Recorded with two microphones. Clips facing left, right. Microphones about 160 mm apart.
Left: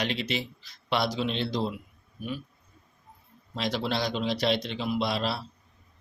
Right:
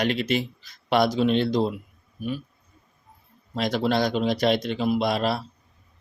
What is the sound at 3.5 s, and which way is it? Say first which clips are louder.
Speech: right 6 dB; 50° right (ahead or behind).